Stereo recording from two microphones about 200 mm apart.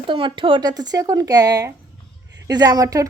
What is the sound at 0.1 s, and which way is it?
A woman's voice, 25° right (ahead or behind).